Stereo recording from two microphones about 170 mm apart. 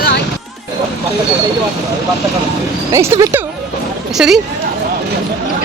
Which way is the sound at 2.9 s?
15° right (ahead or behind).